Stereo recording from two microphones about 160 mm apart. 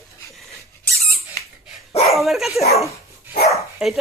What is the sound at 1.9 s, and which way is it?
Dog, 40° left (ahead or behind).